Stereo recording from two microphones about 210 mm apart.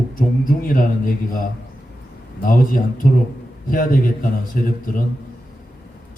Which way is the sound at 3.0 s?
45° left (ahead or behind).